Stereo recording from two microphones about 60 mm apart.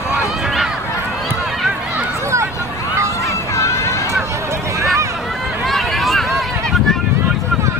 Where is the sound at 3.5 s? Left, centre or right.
Left.